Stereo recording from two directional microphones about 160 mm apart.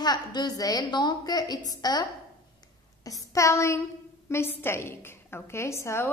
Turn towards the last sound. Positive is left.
turn(degrees=15)  # may be behind; listen again after turning